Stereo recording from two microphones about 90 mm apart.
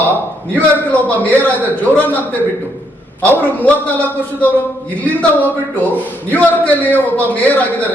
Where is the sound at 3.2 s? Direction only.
15° left (ahead or behind).